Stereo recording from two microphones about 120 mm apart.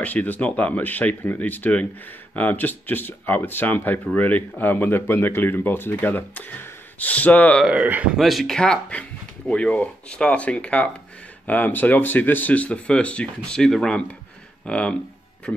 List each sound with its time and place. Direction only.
0.0 s speech: 15° left (ahead or behind)
7.6 s speech: 15° right (ahead or behind); by 15.0 s 10° left (ahead or behind)